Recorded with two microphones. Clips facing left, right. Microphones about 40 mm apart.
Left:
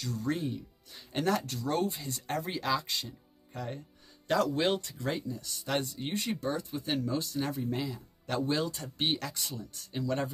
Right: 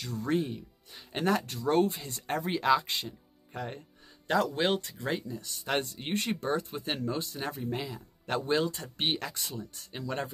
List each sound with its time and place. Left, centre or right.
0.0 s speech: right
0.4 s speech: centre; by 2.1 s right
2.1 s speech: right
5.3 s speech: right
6.1 s speech: right
7.5 s speech: centre
8.3 s speech: right